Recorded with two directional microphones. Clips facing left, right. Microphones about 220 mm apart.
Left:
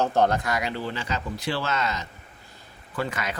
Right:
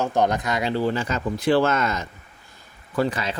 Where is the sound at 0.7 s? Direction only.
45° right (ahead or behind).